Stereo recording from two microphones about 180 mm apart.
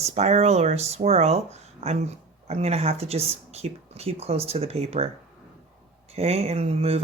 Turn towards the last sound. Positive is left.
turn(degrees=-35)  # may be behind; listen again after turning